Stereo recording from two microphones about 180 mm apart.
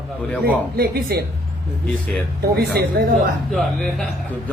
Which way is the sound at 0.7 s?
60° right (ahead or behind).